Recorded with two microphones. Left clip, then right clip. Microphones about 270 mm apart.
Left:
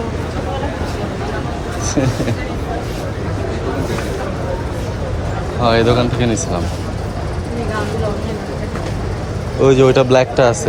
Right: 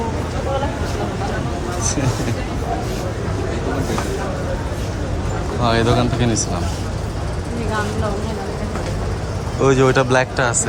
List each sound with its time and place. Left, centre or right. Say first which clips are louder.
5.6 s speech: left 4 dB; centre
9.6 s speech: left 4 dB; centre